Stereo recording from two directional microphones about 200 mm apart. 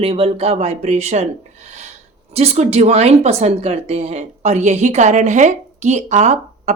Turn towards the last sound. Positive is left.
turn(degrees=-35)  # may be behind; listen again after turning